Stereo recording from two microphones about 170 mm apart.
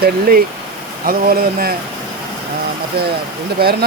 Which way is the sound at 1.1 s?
60° right (ahead or behind).